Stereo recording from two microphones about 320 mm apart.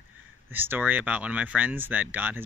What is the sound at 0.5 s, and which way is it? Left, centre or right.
Speech, centre.